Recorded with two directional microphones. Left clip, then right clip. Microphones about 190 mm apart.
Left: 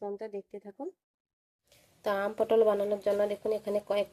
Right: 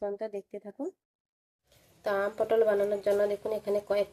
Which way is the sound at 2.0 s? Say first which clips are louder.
Right 1 dB; 30° left (ahead or behind).